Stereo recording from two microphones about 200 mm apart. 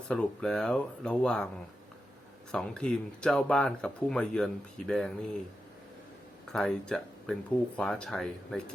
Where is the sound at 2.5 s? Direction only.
5° left (ahead or behind).